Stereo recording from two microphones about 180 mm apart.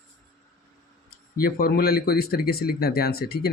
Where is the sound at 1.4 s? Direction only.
55° left (ahead or behind).